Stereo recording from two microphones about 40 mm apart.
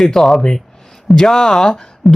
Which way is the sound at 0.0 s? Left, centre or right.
Centre.